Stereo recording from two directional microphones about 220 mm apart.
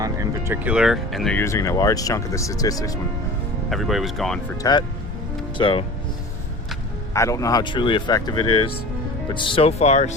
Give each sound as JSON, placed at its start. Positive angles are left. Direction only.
{"t": 0.0, "sound": "speech", "side_deg": -15}
{"t": 3.7, "sound": "speech", "side_deg": 0}
{"t": 4.5, "sound": "speech", "side_deg": 15}
{"t": 7.1, "sound": "speech", "side_deg": 15}